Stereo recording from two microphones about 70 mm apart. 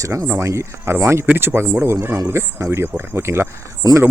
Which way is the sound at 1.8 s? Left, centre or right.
Right.